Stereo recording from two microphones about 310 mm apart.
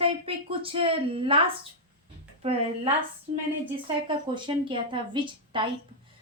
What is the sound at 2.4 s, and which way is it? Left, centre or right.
Speech, centre.